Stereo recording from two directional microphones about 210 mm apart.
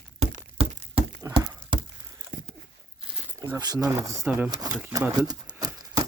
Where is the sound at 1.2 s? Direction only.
15° right (ahead or behind).